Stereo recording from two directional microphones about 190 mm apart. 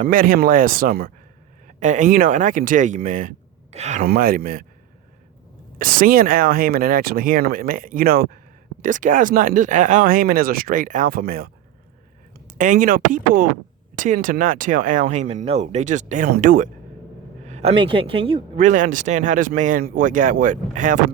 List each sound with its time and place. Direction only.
0.0 s speech: 45° right (ahead or behind)
4.0 s speech: 50° right (ahead or behind)
5.8 s a man's voice: 50° right (ahead or behind); by 18.6 s 30° right (ahead or behind)
18.6 s speech: 40° right (ahead or behind)